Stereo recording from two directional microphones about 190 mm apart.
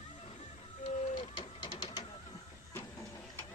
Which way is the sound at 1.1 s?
30° left (ahead or behind).